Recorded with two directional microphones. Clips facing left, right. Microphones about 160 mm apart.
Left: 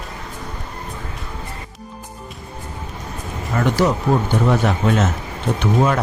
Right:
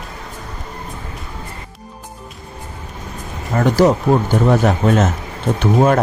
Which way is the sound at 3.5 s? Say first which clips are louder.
Right 5 dB; 40° right (ahead or behind).